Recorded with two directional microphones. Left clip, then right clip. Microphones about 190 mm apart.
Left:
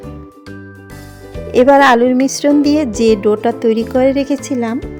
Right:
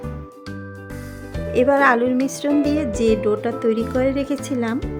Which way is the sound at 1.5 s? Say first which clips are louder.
Left 8 dB; 30° left (ahead or behind).